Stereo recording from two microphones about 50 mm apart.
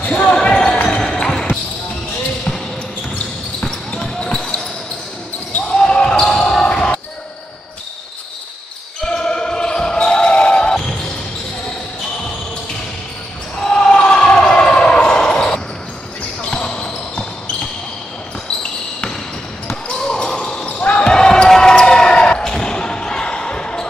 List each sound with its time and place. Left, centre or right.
0.0 s basketball bounce: left
3.9 s basketball bounce: centre
5.8 s basketball bounce: centre
9.0 s basketball bounce: centre
10.7 s basketball bounce: centre
13.6 s basketball bounce: centre
18.6 s basketball bounce: centre
20.6 s basketball bounce: left
21.0 s basketball bounce: centre